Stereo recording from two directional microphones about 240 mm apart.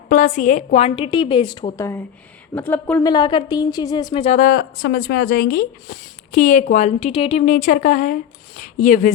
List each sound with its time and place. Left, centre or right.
0.1 s a woman's voice: left
2.6 s a woman's voice: centre
3.1 s a woman's voice: centre
4.4 s speech: left